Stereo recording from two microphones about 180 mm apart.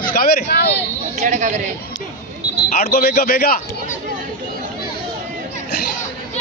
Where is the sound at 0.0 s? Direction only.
55° left (ahead or behind).